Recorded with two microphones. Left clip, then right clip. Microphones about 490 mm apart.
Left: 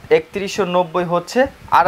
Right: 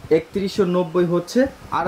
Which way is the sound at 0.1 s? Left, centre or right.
Left.